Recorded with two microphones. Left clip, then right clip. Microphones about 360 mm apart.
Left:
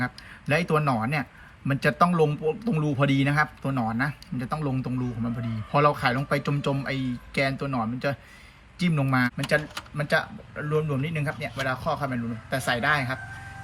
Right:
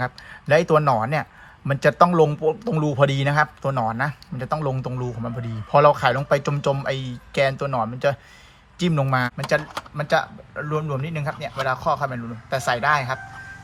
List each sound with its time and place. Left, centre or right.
0.0 s a man's voice: centre